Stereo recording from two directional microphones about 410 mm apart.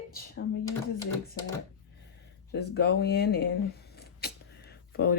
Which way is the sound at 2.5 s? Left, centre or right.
Left.